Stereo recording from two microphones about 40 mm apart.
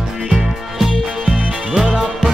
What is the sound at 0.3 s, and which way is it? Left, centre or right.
Music, centre.